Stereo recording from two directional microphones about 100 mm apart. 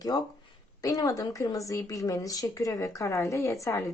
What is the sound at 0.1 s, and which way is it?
Speech, 40° left (ahead or behind).